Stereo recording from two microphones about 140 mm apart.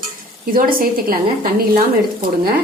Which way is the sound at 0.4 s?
90° right.